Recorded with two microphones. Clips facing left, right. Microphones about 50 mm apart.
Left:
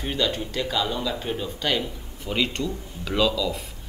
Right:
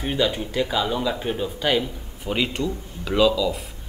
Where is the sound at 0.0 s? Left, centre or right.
Centre.